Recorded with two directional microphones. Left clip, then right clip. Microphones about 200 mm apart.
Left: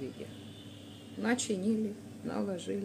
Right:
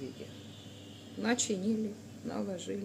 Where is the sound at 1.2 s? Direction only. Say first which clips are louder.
Even; centre (ahead or behind).